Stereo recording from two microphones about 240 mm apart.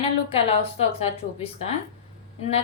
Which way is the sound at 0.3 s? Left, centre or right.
Left.